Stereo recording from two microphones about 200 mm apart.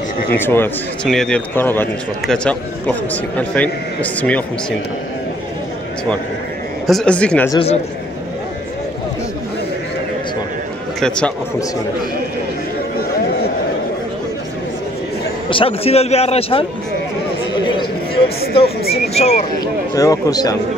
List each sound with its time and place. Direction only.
0.4 s a man's voice: 10° left (ahead or behind)
6.9 s speech: 5° left (ahead or behind)
7.5 s a man's voice: 30° left (ahead or behind)
11.0 s speech: 5° left (ahead or behind)
15.5 s a man's voice: 30° left (ahead or behind)
18.6 s a man's voice: 30° left (ahead or behind)
19.6 s a man's voice: 20° left (ahead or behind)